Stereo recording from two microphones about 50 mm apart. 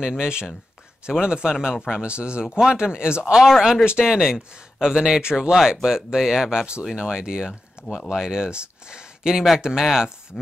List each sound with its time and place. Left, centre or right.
0.0 s speech: centre
10.3 s chopping: centre